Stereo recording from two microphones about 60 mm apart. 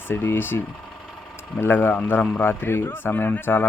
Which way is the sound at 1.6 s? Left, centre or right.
Left.